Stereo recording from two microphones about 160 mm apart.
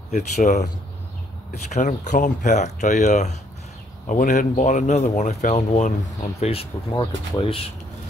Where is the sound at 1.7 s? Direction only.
50° left (ahead or behind).